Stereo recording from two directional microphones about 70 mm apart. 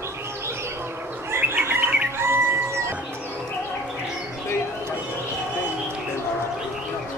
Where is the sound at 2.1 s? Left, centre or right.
Right.